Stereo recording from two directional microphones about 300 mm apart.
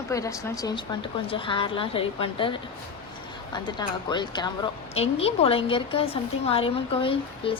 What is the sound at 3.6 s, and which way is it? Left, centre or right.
A woman's voice, centre.